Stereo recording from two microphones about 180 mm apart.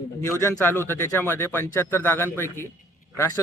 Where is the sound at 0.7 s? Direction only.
10° left (ahead or behind).